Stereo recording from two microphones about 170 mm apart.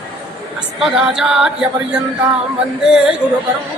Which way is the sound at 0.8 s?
5° right (ahead or behind).